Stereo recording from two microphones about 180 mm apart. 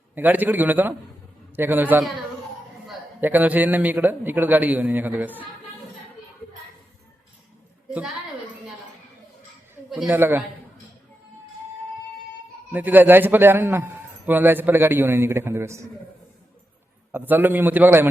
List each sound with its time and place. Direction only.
0.1 s a man's voice: 10° right (ahead or behind)
7.9 s a woman's voice: 5° right (ahead or behind)
9.9 s a man's voice: 10° right (ahead or behind)
12.7 s a man's voice: 10° right (ahead or behind)
17.1 s a man's voice: 10° right (ahead or behind)